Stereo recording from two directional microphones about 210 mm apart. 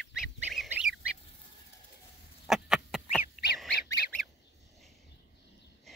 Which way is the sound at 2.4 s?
Centre (ahead or behind).